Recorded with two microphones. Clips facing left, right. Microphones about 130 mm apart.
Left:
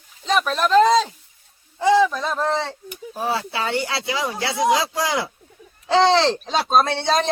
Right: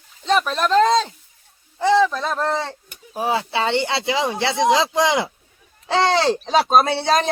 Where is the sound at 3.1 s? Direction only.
15° right (ahead or behind).